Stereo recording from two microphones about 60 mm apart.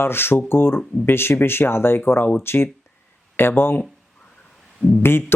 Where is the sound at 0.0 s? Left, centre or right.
Left.